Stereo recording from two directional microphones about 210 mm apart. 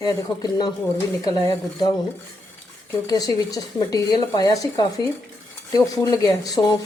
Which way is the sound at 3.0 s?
15° left (ahead or behind).